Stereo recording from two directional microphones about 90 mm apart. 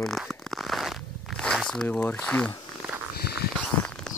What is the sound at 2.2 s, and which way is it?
Speech, 10° left (ahead or behind).